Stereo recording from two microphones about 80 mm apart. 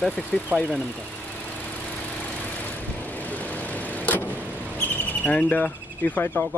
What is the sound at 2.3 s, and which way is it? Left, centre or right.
Vehicle, left.